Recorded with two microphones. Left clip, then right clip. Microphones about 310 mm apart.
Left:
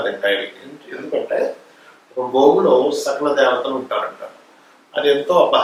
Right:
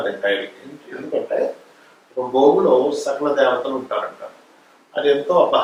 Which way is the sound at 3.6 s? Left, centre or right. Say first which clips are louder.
Left 2 dB; right.